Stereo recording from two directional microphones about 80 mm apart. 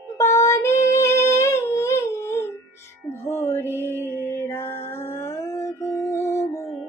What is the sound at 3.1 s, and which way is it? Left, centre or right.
Mantra, left.